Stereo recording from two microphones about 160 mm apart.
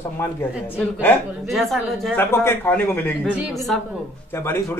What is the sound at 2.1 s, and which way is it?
A man's voice, 15° left (ahead or behind).